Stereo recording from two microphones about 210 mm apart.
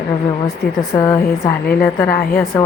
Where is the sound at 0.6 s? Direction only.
45° left (ahead or behind).